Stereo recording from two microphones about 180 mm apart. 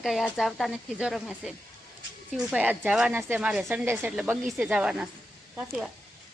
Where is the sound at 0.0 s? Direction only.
Centre (ahead or behind).